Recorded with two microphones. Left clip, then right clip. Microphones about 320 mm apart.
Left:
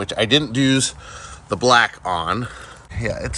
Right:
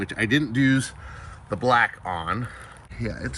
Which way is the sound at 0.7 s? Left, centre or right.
Centre.